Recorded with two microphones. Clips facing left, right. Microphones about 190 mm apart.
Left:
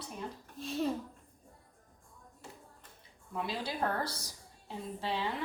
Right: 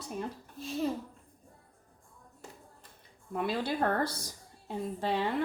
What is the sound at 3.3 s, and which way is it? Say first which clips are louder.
A woman's voice: right 5 dB; 55° right (ahead or behind).